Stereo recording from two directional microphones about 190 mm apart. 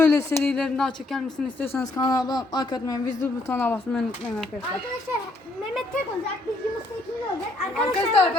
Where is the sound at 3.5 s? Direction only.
10° left (ahead or behind).